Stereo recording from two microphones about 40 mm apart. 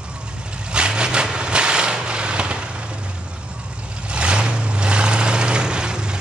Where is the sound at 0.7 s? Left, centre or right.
Right.